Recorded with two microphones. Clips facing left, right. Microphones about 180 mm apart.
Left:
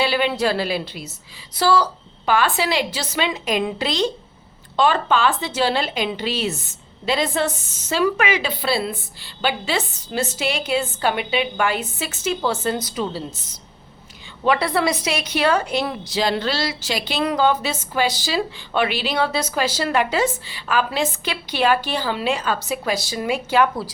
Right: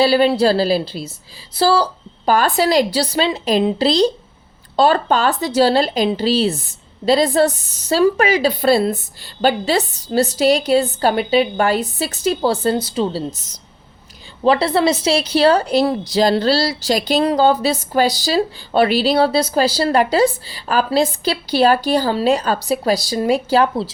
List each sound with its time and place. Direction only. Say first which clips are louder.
0.0 s a woman's voice: right 7 dB; 35° right (ahead or behind)
14.4 s a woman's voice: right 5 dB; 30° right (ahead or behind)